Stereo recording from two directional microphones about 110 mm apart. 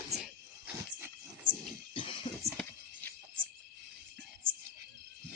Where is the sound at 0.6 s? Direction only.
15° right (ahead or behind).